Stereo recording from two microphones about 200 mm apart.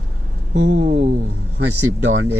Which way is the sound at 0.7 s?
35° right (ahead or behind).